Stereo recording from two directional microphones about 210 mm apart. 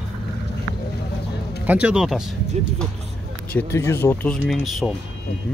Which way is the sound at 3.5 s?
10° left (ahead or behind).